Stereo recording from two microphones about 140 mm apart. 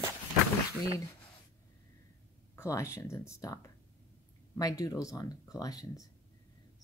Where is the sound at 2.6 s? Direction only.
20° left (ahead or behind).